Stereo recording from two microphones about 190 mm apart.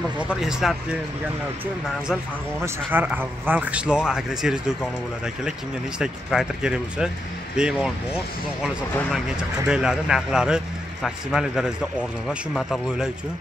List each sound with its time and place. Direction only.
0.2 s speech: 5° right (ahead or behind)
2.6 s speech: 10° right (ahead or behind)
5.9 s speech: 5° right (ahead or behind)
9.1 s speech: 5° right (ahead or behind)